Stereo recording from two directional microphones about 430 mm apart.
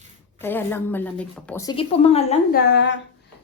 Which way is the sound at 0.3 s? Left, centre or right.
Centre.